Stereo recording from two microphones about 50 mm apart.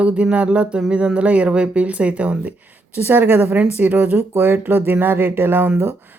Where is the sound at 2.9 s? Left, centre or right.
Right.